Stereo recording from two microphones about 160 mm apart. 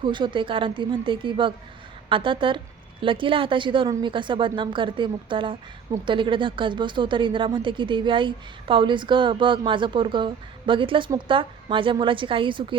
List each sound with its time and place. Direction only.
0.0 s speech: 30° right (ahead or behind)